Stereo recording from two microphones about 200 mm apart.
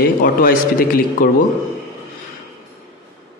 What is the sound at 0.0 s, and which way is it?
A man's voice, 45° left (ahead or behind).